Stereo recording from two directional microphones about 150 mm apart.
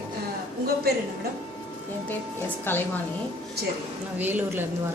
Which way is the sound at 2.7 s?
15° left (ahead or behind).